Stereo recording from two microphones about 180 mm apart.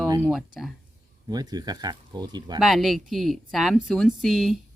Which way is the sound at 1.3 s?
20° right (ahead or behind).